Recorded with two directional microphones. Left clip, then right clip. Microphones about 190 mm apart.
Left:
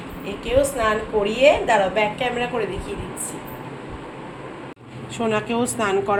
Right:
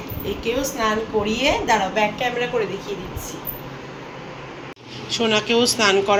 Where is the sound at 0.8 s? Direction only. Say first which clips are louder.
Left 1 dB; 20° left (ahead or behind).